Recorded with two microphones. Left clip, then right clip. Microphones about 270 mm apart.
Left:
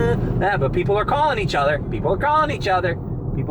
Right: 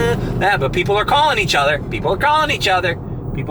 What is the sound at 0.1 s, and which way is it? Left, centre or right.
Speech, centre.